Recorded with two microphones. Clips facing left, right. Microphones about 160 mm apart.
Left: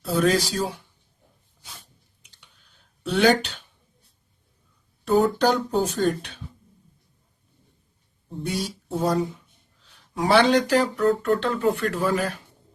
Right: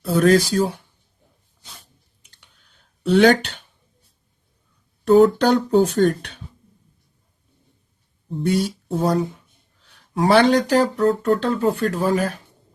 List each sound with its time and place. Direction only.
0.0 s speech: 55° right (ahead or behind)
3.1 s speech: 60° right (ahead or behind)
5.0 s speech: 65° right (ahead or behind)
8.4 s speech: 60° right (ahead or behind)
10.2 s speech: 50° right (ahead or behind)